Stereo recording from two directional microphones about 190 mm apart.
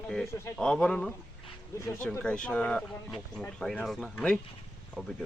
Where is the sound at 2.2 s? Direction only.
5° left (ahead or behind).